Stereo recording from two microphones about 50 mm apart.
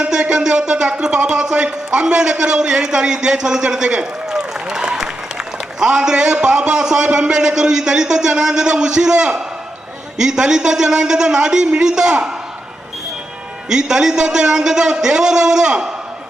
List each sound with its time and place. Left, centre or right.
0.0 s a sound: centre
1.0 s a man's voice: centre
13.7 s a man's voice: centre